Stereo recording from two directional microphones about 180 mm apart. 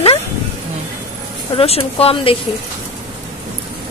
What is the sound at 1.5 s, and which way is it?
Speech, 35° left (ahead or behind).